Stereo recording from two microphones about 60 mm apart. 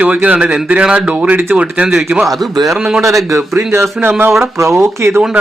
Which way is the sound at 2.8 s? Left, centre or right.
Centre.